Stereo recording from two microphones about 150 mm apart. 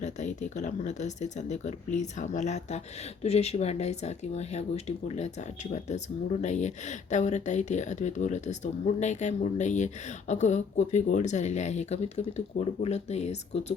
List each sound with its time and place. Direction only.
0.0 s speech: 50° left (ahead or behind)